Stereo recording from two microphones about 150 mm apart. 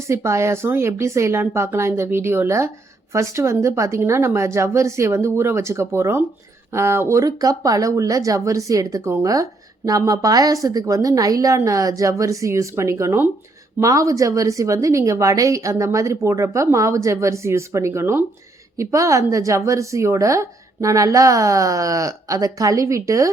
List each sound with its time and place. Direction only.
0.1 s speech: 20° right (ahead or behind)